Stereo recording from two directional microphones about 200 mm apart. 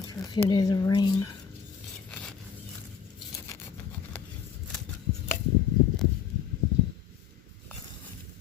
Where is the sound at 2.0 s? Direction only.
5° left (ahead or behind).